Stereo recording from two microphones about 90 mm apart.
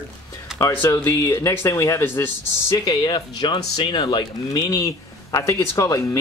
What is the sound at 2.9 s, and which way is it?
Speech, 50° left (ahead or behind).